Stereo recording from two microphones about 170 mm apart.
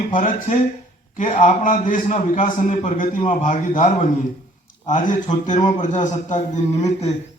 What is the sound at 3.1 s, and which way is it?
Speech, 30° left (ahead or behind).